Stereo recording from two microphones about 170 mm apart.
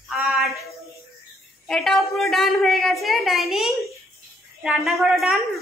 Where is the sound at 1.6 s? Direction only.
Centre (ahead or behind).